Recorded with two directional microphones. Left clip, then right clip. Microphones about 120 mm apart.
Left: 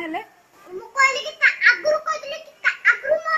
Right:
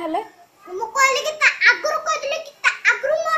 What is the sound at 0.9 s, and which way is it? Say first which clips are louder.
A child's voice: right 1 dB; 35° right (ahead or behind).